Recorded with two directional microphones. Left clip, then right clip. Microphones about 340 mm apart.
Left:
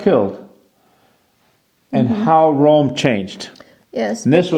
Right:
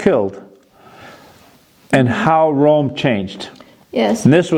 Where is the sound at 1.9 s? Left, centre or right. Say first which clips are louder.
Right 1 dB; right.